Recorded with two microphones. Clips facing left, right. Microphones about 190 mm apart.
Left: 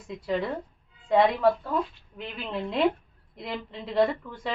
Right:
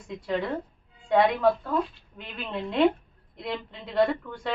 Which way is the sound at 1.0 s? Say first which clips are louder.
Even; centre (ahead or behind).